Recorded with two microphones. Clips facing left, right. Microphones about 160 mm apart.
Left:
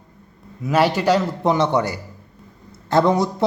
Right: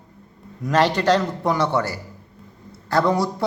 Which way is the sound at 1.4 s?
20° left (ahead or behind).